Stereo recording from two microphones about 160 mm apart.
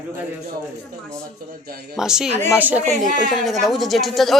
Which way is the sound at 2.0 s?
5° right (ahead or behind).